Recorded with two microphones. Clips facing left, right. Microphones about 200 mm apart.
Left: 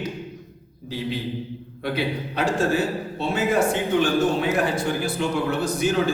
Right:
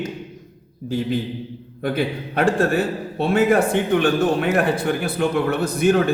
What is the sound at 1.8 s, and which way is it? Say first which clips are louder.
A man's voice: right 3 dB; 50° right (ahead or behind).